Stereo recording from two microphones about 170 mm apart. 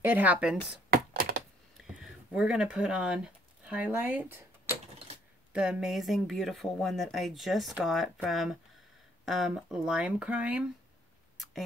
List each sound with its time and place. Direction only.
0.0 s speech: 10° right (ahead or behind)
0.8 s computer keyboard: 60° right (ahead or behind)
1.8 s a sound: 5° right (ahead or behind)
3.6 s speech: 10° right (ahead or behind)